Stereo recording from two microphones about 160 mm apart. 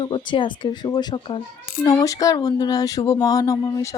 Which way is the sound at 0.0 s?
30° left (ahead or behind).